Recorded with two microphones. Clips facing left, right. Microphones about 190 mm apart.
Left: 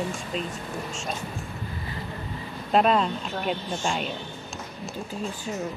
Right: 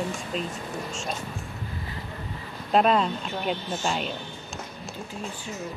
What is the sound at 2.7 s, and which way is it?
Speech, centre (ahead or behind).